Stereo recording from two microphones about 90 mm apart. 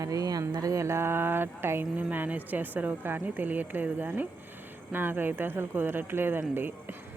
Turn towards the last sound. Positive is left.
turn(degrees=-25)  # may be behind; listen again after turning